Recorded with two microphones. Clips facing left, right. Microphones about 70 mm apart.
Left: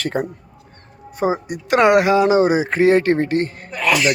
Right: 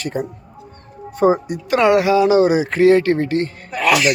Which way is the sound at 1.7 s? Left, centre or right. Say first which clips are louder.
Even; left.